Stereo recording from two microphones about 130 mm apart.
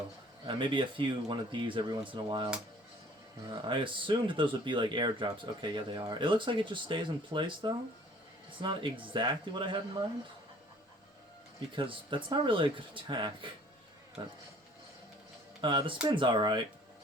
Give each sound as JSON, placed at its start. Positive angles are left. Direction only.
{"t": 0.4, "sound": "speech", "side_deg": -40}
{"t": 3.5, "sound": "speech", "side_deg": -40}
{"t": 11.7, "sound": "speech", "side_deg": -40}
{"t": 15.6, "sound": "speech", "side_deg": -40}